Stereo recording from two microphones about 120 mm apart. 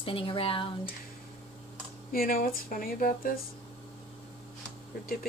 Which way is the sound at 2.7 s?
90° left.